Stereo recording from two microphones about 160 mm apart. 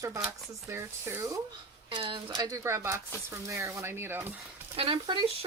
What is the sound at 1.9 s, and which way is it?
Speech, 30° right (ahead or behind).